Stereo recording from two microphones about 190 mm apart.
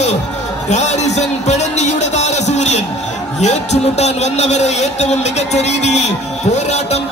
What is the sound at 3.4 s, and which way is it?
A man's voice, 35° left (ahead or behind).